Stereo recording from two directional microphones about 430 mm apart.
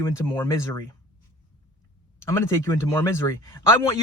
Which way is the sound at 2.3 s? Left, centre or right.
Centre.